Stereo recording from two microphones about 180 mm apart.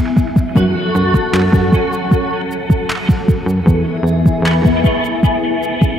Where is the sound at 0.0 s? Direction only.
Centre (ahead or behind).